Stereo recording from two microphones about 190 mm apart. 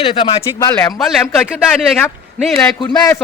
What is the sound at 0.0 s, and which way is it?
Speech, 25° left (ahead or behind).